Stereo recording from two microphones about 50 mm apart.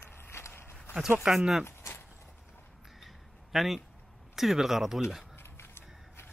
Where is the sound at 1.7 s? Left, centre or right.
Left.